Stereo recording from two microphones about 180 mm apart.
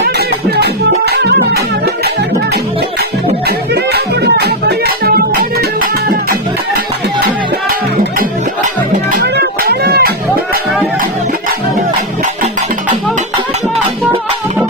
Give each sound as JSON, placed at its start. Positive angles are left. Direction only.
{"t": 0.0, "sound": "music", "side_deg": -65}
{"t": 3.9, "sound": "music", "side_deg": -65}
{"t": 9.2, "sound": "music", "side_deg": -65}